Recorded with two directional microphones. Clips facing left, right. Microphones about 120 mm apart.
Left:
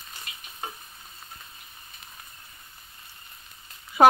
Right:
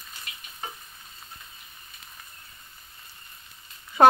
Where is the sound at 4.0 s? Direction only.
10° left (ahead or behind).